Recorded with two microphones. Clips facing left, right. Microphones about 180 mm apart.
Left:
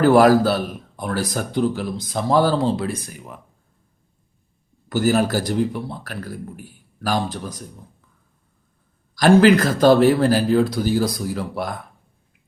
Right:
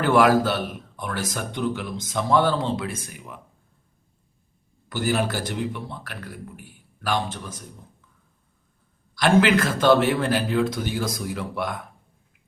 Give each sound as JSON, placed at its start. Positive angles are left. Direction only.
{"t": 0.0, "sound": "a man's voice", "side_deg": 40}
{"t": 4.9, "sound": "a man's voice", "side_deg": 40}
{"t": 9.1, "sound": "a man's voice", "side_deg": 35}